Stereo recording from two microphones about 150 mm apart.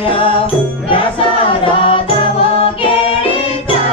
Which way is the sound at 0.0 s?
35° left (ahead or behind).